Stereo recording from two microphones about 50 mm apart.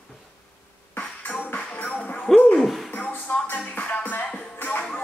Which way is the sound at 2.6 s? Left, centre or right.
Centre.